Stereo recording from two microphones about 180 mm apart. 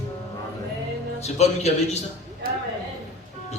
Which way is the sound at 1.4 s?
35° left (ahead or behind).